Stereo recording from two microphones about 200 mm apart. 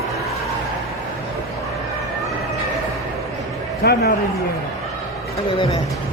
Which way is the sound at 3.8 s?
55° left (ahead or behind).